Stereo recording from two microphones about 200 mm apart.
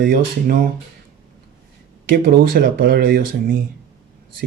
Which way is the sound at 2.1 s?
50° right (ahead or behind).